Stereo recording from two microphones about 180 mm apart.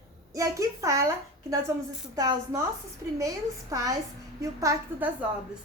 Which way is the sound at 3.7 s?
20° right (ahead or behind).